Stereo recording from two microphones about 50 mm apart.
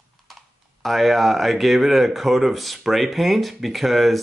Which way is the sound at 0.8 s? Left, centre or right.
Centre.